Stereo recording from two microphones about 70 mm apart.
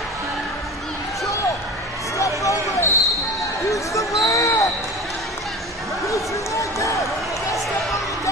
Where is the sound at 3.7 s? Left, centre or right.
Left.